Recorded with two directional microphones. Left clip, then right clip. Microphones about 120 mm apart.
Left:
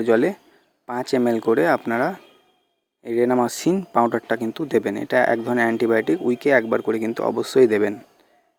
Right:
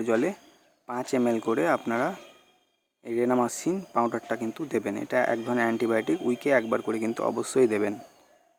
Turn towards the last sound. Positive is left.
turn(degrees=25)  # may be behind; listen again after turning